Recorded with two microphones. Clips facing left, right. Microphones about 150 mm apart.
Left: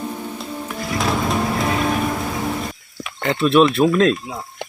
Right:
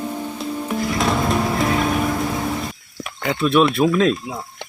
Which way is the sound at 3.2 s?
Centre (ahead or behind).